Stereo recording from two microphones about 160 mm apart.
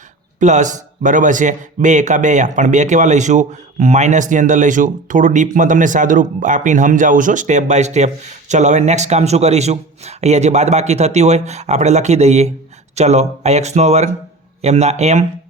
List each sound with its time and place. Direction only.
0.3 s a man's voice: 50° right (ahead or behind)